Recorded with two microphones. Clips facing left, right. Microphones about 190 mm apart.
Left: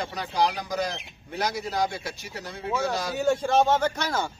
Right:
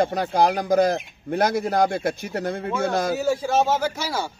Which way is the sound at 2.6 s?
Centre (ahead or behind).